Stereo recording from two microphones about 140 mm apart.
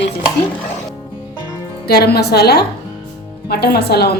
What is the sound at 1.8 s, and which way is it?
Speech, 90° left.